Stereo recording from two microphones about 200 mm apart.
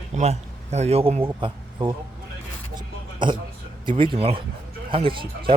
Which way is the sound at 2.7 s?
25° right (ahead or behind).